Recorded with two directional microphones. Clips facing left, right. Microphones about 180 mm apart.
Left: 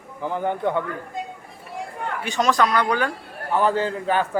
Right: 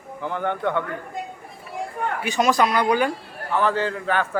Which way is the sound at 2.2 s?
10° right (ahead or behind).